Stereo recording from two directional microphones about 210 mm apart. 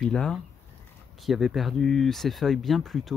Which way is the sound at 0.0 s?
5° left (ahead or behind).